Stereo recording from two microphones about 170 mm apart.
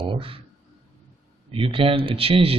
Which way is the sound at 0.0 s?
30° right (ahead or behind).